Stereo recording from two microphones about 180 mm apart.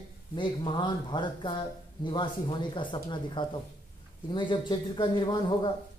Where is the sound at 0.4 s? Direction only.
25° left (ahead or behind).